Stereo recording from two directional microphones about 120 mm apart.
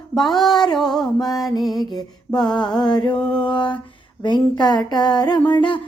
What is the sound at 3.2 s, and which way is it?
Mantra, 5° left (ahead or behind).